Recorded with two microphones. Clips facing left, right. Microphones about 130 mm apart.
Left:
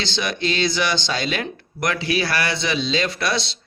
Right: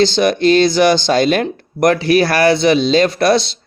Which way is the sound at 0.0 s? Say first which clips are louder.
Right 13 dB; 45° right (ahead or behind).